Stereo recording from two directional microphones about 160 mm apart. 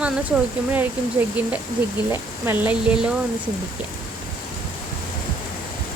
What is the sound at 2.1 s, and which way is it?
Speech, 15° right (ahead or behind).